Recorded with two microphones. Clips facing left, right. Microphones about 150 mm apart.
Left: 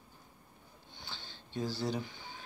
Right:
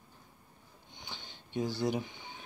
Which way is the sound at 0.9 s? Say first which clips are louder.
Right 1 dB; 15° right (ahead or behind).